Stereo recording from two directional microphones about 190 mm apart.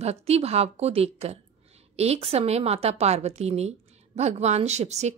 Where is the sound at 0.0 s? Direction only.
35° right (ahead or behind).